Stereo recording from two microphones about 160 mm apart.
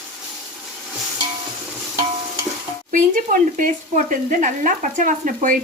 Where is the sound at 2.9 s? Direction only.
55° right (ahead or behind).